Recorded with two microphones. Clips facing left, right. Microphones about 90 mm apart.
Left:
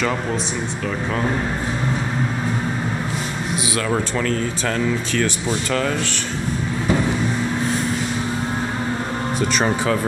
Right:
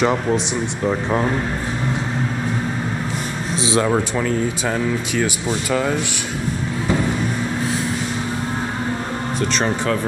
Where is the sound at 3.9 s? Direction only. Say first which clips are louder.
Right 2 dB; 15° right (ahead or behind).